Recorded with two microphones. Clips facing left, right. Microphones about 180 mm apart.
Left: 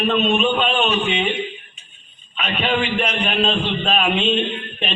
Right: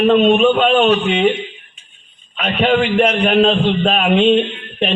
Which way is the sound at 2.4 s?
50° right (ahead or behind).